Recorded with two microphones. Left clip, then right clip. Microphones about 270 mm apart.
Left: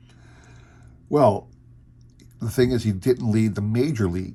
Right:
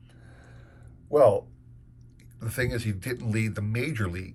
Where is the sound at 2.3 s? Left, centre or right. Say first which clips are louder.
Left 8 dB; centre.